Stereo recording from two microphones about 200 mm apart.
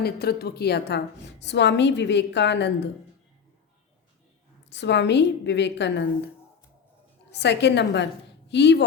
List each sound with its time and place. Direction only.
0.0 s a woman's voice: 50° left (ahead or behind)
4.7 s a woman's voice: 60° left (ahead or behind)
7.3 s a woman's voice: 60° left (ahead or behind)